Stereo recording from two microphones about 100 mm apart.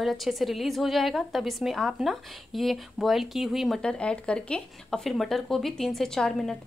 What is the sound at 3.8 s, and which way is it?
Speech, 10° left (ahead or behind).